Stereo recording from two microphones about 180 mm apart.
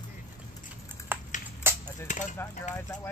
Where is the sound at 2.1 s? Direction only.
45° left (ahead or behind).